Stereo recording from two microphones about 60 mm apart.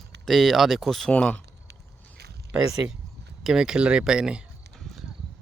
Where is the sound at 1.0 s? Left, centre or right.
Centre.